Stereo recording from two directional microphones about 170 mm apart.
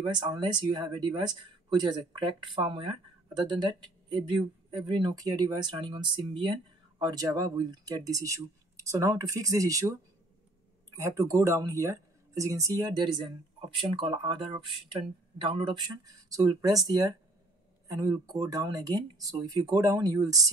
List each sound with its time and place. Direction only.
0.0 s speech: 25° right (ahead or behind)
11.0 s speech: 20° right (ahead or behind)
18.2 s speech: 20° right (ahead or behind)